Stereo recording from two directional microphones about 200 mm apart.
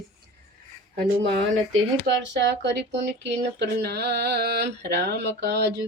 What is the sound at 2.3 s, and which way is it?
Speech, 60° right (ahead or behind).